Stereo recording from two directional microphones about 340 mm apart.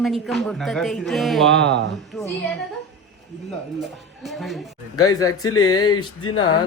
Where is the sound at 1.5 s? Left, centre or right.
Right.